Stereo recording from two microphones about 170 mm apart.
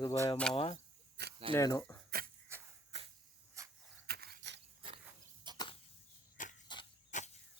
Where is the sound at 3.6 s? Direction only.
15° right (ahead or behind).